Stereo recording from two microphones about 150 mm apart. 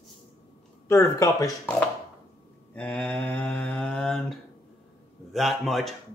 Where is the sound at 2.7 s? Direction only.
10° left (ahead or behind).